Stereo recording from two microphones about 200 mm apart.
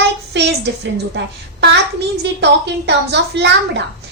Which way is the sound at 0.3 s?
60° right (ahead or behind).